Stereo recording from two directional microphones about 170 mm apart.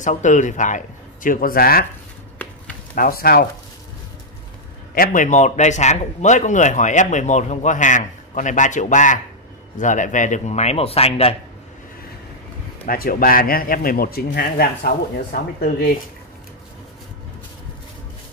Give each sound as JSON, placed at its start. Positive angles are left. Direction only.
{"t": 0.0, "sound": "speech", "side_deg": 45}
{"t": 2.9, "sound": "a man's voice", "side_deg": 60}
{"t": 4.9, "sound": "a man's voice", "side_deg": 55}
{"t": 12.8, "sound": "a man's voice", "side_deg": 55}